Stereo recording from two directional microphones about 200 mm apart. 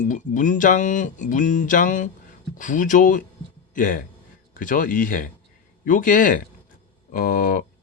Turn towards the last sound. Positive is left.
turn(degrees=45)  # may be behind; listen again after turning